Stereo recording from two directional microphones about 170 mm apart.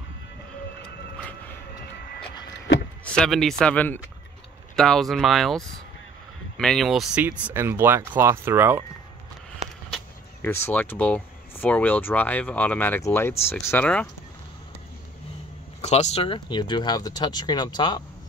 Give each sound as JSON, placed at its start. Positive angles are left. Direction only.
{"t": 3.2, "sound": "speech", "side_deg": 0}
{"t": 10.4, "sound": "speech", "side_deg": 10}
{"t": 15.8, "sound": "speech", "side_deg": 40}